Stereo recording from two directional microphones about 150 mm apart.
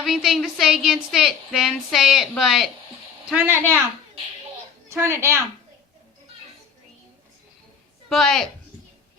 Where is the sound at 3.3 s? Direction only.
15° right (ahead or behind).